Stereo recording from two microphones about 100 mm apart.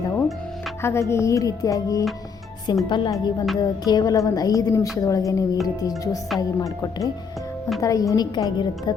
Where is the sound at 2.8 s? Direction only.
50° left (ahead or behind).